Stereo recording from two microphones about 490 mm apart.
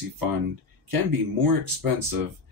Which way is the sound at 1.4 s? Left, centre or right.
Right.